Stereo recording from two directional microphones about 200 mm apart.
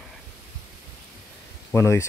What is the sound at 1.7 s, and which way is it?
Speech, 15° left (ahead or behind).